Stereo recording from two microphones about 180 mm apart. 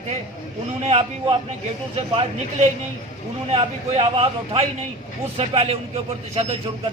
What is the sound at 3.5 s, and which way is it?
A man's voice, 35° right (ahead or behind).